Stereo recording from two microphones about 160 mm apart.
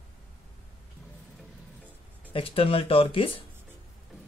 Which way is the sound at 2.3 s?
35° left (ahead or behind).